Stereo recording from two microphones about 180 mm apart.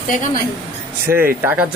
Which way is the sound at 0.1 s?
50° left (ahead or behind).